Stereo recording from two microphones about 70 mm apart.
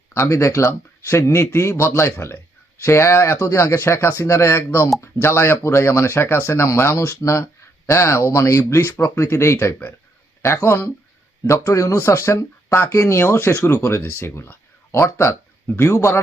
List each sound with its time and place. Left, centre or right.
0.1 s speech: left
15.0 s speech: left
15.9 s speech: left